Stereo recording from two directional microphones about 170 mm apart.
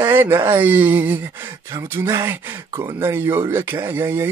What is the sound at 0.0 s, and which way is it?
Speech, 15° right (ahead or behind).